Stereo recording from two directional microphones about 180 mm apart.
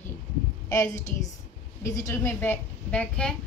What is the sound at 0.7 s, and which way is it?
A woman's voice, 15° left (ahead or behind).